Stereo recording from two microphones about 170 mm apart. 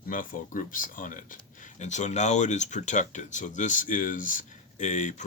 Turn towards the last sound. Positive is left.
turn(degrees=45)  # may be behind; listen again after turning